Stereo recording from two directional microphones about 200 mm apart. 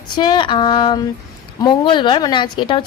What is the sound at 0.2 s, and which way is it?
A woman's voice, 20° left (ahead or behind).